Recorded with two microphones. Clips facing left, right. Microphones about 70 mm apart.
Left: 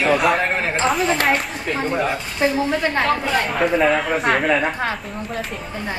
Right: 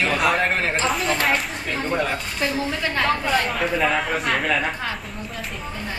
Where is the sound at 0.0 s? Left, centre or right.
Centre.